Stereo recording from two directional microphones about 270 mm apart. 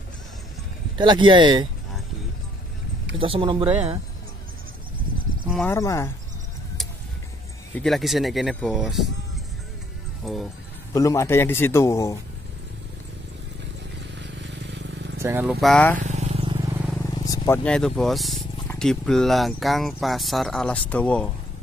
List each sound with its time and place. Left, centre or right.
0.9 s speech: centre
3.2 s speech: centre
5.5 s a man's voice: centre
7.7 s speech: centre
10.2 s speech: centre
10.9 s a man's voice: centre
14.1 s vehicle: right
15.2 s speech: centre
15.6 s speech: centre
16.0 s vehicle: right
17.0 s speech: centre